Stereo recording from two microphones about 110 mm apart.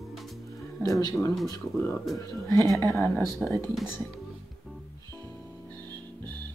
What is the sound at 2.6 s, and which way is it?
Speech, 30° right (ahead or behind).